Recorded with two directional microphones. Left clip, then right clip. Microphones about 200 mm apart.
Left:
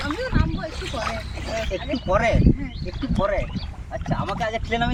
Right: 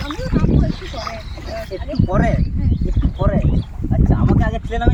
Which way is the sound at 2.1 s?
30° left (ahead or behind).